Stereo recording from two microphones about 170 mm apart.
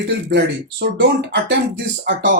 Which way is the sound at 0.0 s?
90° right.